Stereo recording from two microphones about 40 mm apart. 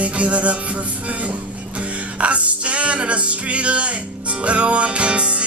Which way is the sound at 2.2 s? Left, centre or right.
Right.